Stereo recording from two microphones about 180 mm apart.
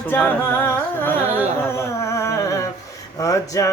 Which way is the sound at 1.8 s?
15° left (ahead or behind).